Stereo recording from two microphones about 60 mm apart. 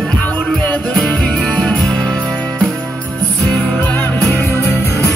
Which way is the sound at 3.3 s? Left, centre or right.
Left.